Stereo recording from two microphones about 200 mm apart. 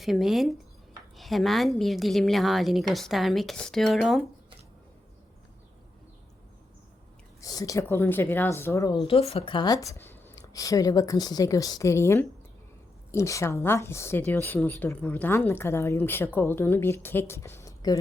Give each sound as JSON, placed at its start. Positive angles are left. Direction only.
{"t": 0.0, "sound": "a woman's voice", "side_deg": 0}
{"t": 7.4, "sound": "a woman's voice", "side_deg": 20}